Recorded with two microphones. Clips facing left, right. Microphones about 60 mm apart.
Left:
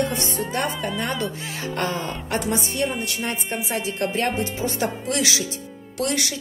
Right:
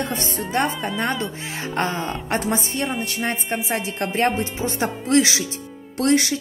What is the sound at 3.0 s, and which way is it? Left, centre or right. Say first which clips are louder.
Music: right 2 dB; right.